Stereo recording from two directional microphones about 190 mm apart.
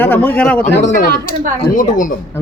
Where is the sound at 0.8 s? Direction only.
40° left (ahead or behind).